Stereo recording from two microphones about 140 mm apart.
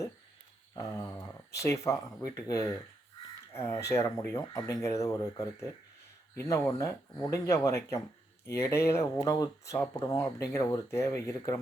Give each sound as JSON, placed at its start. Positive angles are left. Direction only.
{"t": 0.9, "sound": "speech", "side_deg": 20}